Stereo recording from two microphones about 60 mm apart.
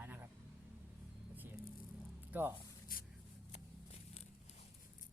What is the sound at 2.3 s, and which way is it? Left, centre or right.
Speech, right.